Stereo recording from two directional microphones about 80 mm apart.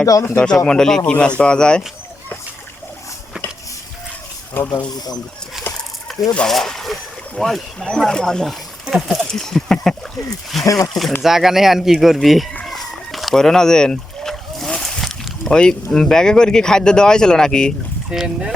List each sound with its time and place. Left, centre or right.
0.0 s speech: left
0.3 s speech: centre
4.6 s speech: left
5.7 s a sound: left
6.1 s a sound: centre
6.5 s speech: centre
10.6 s speech: left
10.8 s speech: centre
12.9 s a sound: centre
15.5 s speech: centre
18.1 s speech: centre